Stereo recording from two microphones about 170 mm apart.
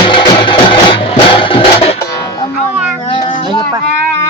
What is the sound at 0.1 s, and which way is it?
Music, 30° left (ahead or behind).